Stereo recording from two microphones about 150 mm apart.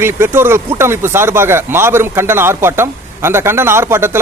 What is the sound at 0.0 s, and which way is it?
Speech, 15° right (ahead or behind).